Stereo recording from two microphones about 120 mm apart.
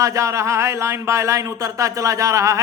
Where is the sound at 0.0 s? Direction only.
25° right (ahead or behind).